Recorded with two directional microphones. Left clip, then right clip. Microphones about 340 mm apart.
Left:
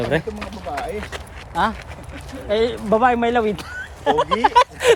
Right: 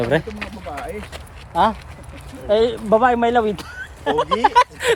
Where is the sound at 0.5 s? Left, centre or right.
Centre.